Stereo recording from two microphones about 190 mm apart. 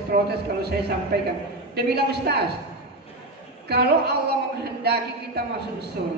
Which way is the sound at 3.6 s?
60° right (ahead or behind).